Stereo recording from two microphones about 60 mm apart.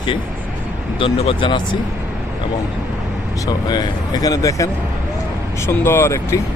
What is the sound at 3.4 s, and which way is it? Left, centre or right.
Speech, left.